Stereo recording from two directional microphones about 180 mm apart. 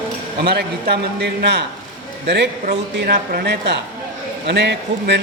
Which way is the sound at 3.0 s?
65° right (ahead or behind).